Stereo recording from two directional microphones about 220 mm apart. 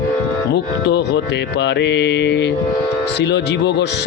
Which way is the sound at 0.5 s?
50° left (ahead or behind).